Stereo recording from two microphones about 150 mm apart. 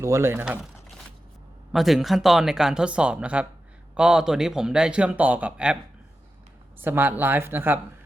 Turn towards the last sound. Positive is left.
turn(degrees=-15)  # may be behind; listen again after turning